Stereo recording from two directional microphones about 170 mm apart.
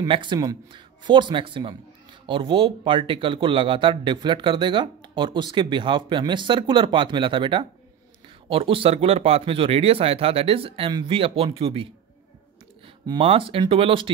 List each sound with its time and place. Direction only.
0.0 s speech: 30° right (ahead or behind)